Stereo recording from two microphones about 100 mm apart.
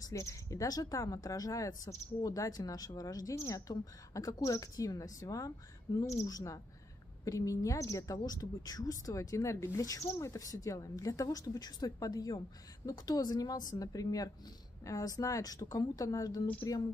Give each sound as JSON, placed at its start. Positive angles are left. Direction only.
{"t": 0.0, "sound": "speech", "side_deg": 30}
{"t": 5.9, "sound": "a woman's voice", "side_deg": 45}
{"t": 6.2, "sound": "speech", "side_deg": 35}